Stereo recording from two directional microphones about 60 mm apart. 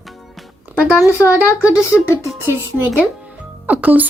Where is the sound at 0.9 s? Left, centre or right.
Left.